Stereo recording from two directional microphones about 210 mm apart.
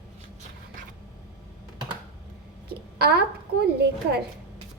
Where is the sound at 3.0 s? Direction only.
50° right (ahead or behind).